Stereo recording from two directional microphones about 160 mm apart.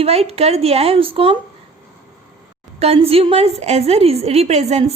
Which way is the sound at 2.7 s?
40° right (ahead or behind).